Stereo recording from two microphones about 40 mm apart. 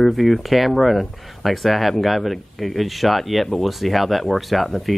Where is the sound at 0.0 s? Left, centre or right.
Centre.